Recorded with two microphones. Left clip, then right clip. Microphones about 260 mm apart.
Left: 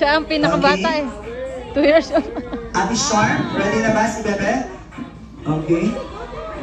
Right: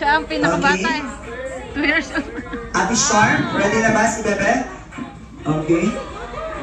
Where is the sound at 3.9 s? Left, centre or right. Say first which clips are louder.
Right 1 dB; centre.